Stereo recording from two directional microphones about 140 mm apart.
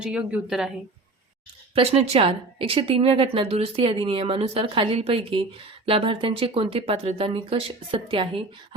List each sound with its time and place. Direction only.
0.0 s a woman's voice: 5° right (ahead or behind)
1.7 s a woman's voice: 45° right (ahead or behind)